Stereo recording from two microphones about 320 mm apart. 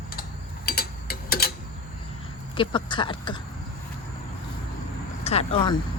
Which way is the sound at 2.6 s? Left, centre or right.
Centre.